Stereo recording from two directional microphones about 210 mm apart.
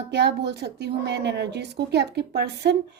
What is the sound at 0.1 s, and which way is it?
A woman's voice, 55° right (ahead or behind).